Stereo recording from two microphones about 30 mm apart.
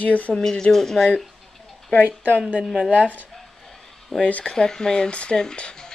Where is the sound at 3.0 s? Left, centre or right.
Left.